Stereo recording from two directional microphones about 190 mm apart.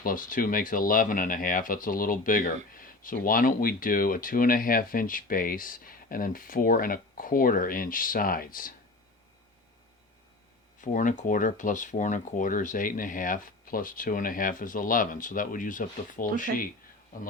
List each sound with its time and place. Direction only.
0.0 s speech: 45° left (ahead or behind)
10.8 s speech: 45° left (ahead or behind)